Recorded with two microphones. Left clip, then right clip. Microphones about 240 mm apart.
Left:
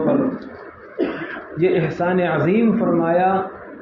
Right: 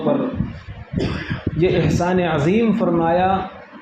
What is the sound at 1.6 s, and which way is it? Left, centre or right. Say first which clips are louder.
A man's voice: even; right.